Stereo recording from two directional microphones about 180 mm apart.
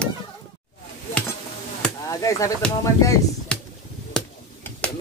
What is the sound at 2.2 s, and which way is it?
Speech, 15° left (ahead or behind).